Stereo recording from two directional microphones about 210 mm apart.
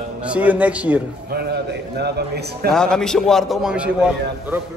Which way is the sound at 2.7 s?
5° left (ahead or behind).